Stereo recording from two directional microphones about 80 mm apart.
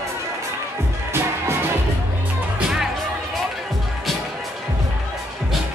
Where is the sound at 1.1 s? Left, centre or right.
Right.